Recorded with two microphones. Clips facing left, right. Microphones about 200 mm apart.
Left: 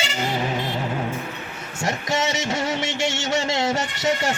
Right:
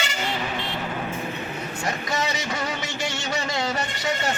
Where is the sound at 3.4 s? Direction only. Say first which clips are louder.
Left 4 dB; 25° left (ahead or behind).